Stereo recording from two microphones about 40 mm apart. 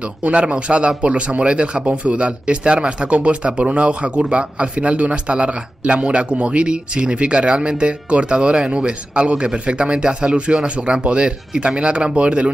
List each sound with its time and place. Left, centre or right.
0.0 s speech: right